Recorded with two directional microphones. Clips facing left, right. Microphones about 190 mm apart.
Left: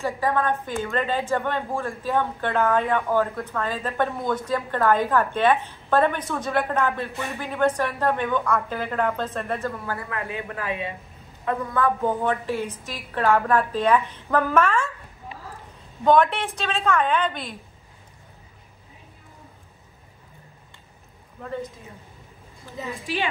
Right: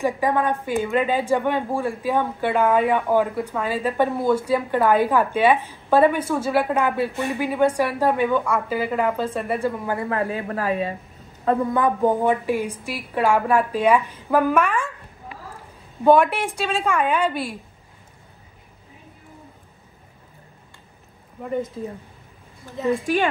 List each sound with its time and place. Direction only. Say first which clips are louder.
0.0 s speech: right 3 dB; 15° right (ahead or behind)
10.0 s a woman's voice: right 7 dB; 35° right (ahead or behind)
11.4 s speech: right 4 dB; 25° right (ahead or behind)
16.0 s speech: right 3 dB; 10° right (ahead or behind)
21.4 s speech: right 6 dB; 15° right (ahead or behind)
22.8 s a woman's voice: right 11 dB; centre (ahead or behind)